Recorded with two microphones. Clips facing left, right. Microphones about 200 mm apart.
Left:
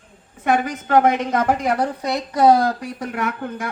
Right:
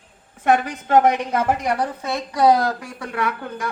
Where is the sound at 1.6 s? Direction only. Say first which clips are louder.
Left 2 dB; 10° left (ahead or behind).